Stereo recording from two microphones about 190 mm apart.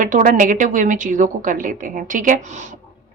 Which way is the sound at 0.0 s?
45° right (ahead or behind).